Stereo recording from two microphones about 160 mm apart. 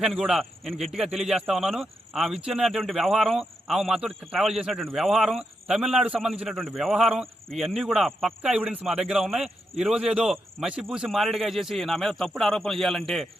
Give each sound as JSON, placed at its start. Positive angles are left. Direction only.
{"t": 0.0, "sound": "a man's voice", "side_deg": 0}